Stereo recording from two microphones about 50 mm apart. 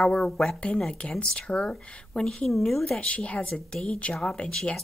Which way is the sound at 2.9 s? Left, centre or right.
Left.